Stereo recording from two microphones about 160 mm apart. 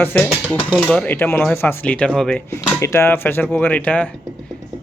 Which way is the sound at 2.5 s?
15° left (ahead or behind).